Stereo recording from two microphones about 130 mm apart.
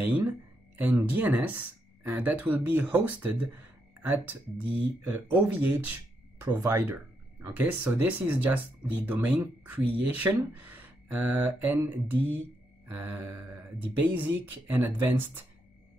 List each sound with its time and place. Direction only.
0.0 s speech: 15° right (ahead or behind)